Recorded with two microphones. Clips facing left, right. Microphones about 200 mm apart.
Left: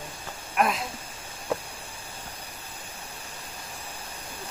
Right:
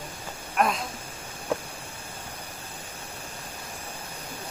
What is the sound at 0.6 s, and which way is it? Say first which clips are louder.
Speech: even; centre (ahead or behind).